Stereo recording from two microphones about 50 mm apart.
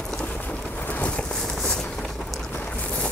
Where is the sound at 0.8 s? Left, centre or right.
Left.